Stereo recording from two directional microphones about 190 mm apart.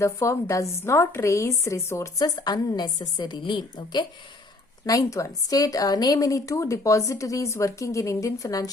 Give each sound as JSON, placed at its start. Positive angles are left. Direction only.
{"t": 0.0, "sound": "a woman's voice", "side_deg": 15}